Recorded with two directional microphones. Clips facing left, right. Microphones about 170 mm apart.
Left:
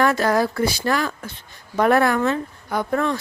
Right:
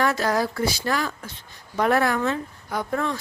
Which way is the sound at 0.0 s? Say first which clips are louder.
Left 4 dB; 55° left (ahead or behind).